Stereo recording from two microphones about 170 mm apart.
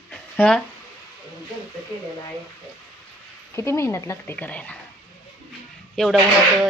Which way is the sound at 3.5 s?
15° left (ahead or behind).